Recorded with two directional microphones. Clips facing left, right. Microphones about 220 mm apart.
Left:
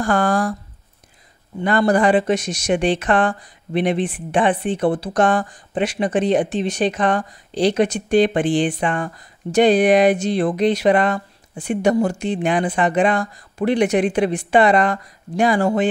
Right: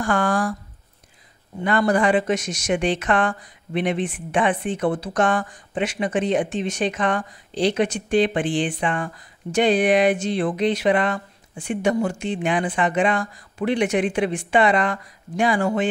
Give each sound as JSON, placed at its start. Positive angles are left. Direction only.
{"t": 0.0, "sound": "speech", "side_deg": 35}
{"t": 1.6, "sound": "speech", "side_deg": 35}